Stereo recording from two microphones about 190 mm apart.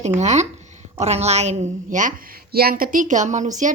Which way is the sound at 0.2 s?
35° right (ahead or behind).